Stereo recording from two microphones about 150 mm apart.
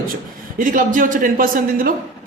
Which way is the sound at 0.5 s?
65° right (ahead or behind).